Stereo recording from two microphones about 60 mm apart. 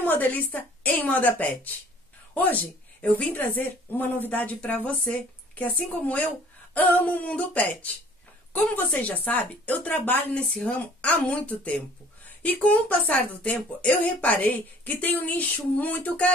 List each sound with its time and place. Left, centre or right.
0.0 s a woman's voice: left
8.9 s a woman's voice: left
10.5 s a woman's voice: centre